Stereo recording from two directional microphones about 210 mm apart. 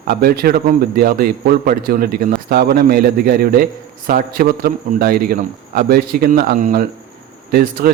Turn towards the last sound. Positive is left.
turn(degrees=-45)  # may be behind; listen again after turning